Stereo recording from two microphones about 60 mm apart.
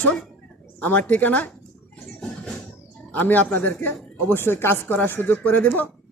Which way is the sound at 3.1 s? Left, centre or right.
Left.